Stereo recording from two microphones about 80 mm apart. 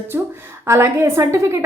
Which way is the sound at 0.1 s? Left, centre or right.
Right.